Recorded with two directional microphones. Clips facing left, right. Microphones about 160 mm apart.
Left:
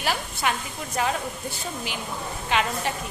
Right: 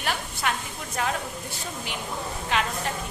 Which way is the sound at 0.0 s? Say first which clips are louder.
Left 2 dB; 5° left (ahead or behind).